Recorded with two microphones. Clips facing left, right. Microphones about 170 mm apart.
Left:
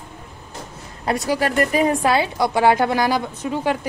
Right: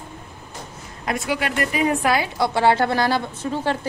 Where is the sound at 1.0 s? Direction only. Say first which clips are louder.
Left 4 dB; 40° left (ahead or behind).